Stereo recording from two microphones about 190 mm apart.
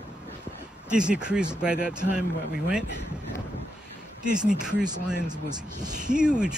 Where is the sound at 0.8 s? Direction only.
5° right (ahead or behind).